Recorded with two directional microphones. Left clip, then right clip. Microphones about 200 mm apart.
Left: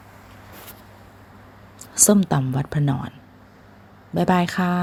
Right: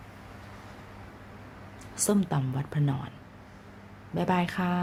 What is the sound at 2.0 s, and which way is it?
Speech, 35° left (ahead or behind).